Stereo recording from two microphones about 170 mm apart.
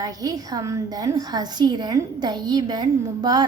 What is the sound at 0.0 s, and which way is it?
A woman's voice, 20° right (ahead or behind).